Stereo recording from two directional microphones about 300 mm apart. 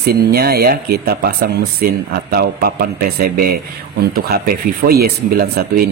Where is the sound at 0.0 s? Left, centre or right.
Right.